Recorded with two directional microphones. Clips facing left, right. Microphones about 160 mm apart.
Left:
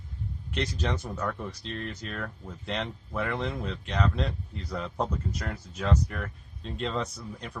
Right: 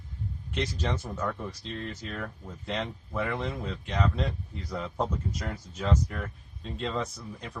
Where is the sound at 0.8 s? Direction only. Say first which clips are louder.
Even; 10° right (ahead or behind).